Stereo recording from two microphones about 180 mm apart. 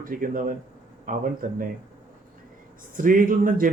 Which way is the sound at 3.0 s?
50° right (ahead or behind).